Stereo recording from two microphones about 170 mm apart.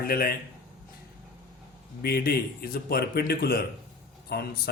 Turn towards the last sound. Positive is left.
turn(degrees=65)  # may be behind; listen again after turning